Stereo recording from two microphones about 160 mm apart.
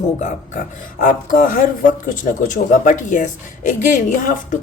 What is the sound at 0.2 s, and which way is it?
A woman's voice, 50° left (ahead or behind).